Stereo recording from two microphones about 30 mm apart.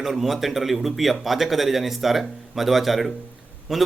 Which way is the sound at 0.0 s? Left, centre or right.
Centre.